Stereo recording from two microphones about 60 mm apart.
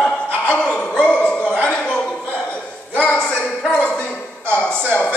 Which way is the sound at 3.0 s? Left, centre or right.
Left.